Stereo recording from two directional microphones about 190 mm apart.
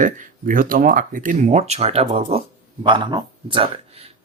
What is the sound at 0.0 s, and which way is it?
Speech, 45° right (ahead or behind).